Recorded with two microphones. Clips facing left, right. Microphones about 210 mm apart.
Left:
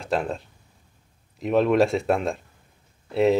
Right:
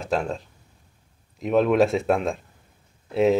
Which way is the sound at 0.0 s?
Centre (ahead or behind).